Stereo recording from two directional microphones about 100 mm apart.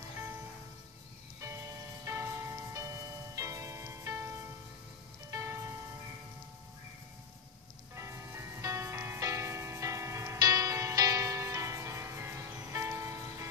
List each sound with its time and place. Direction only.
2.0 s music: 25° right (ahead or behind)
5.3 s music: 35° right (ahead or behind)
7.9 s music: 30° right (ahead or behind)